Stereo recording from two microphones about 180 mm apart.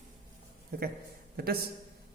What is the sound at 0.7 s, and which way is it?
Speech, 55° right (ahead or behind).